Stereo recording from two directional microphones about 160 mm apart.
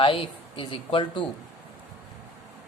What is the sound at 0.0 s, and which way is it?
A man's voice, 35° left (ahead or behind).